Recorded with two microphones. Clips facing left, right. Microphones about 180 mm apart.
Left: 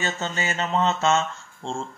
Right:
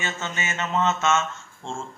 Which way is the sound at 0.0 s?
35° left (ahead or behind).